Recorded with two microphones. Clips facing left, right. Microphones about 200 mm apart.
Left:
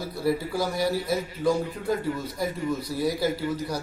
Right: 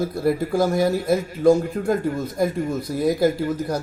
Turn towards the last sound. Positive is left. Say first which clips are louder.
# right 5 dB
turn(degrees=-50)  # may be behind; listen again after turning